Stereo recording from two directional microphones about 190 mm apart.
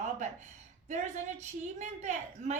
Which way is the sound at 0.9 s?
40° right (ahead or behind).